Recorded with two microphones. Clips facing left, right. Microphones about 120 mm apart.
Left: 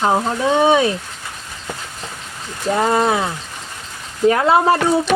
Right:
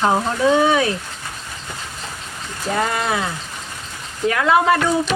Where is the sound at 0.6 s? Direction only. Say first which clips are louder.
Left 3 dB; 25° left (ahead or behind).